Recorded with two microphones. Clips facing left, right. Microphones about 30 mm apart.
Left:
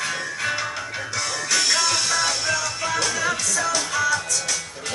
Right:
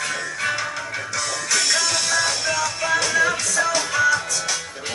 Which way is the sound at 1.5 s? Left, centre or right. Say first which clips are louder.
Even; centre.